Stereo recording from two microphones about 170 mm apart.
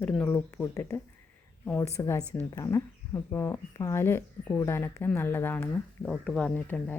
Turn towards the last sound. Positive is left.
turn(degrees=10)  # may be behind; listen again after turning